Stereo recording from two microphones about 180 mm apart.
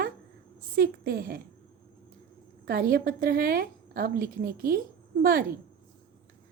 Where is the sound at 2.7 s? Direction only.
55° right (ahead or behind).